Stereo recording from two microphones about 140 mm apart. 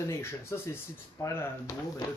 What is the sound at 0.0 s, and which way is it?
Speech, 20° left (ahead or behind).